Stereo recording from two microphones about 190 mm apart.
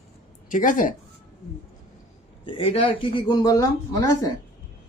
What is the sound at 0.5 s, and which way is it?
Speech, 45° left (ahead or behind).